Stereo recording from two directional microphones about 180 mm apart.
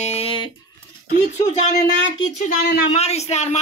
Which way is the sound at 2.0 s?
90° left.